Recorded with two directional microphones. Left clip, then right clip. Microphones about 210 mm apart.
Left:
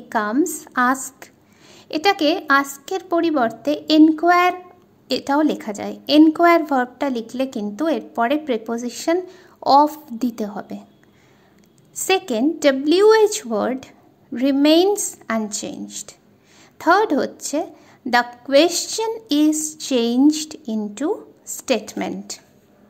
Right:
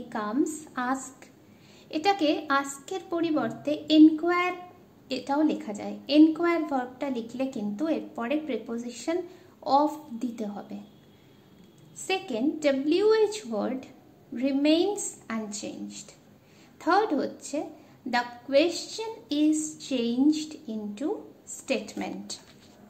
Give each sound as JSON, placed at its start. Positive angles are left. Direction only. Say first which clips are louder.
{"t": 0.1, "sound": "a woman's voice", "louder": "left 9 dB", "side_deg": 45}
{"t": 11.9, "sound": "a woman's voice", "louder": "left 10 dB", "side_deg": 50}